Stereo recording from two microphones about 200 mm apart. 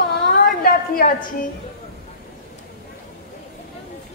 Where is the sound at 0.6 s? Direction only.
45° left (ahead or behind).